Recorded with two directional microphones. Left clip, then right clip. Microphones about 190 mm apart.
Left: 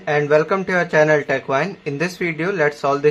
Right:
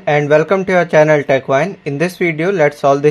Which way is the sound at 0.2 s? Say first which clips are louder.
Right 4 dB; 25° right (ahead or behind).